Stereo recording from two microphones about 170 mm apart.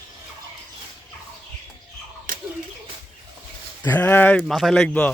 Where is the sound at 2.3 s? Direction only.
55° right (ahead or behind).